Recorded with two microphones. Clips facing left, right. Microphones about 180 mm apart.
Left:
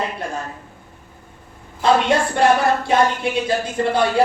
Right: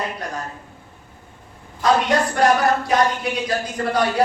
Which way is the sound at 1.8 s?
25° left (ahead or behind).